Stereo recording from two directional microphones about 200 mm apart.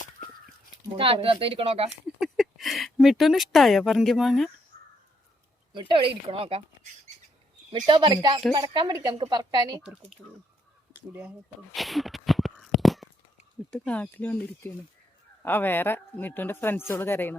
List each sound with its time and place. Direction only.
0.9 s a woman's voice: 25° right (ahead or behind)
2.1 s speech: centre (ahead or behind)
5.7 s a woman's voice: 25° right (ahead or behind)
7.7 s a woman's voice: 25° right (ahead or behind)
10.2 s speech: 5° left (ahead or behind)
11.1 s a sound: 5° right (ahead or behind)
13.7 s speech: 5° left (ahead or behind)